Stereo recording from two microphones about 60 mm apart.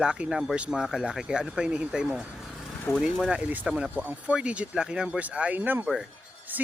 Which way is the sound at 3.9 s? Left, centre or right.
Right.